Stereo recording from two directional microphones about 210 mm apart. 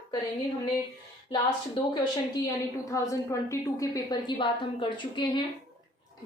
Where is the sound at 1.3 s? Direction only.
20° left (ahead or behind).